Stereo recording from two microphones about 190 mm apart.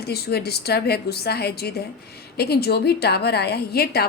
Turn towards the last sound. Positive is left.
turn(degrees=55)  # may be behind; listen again after turning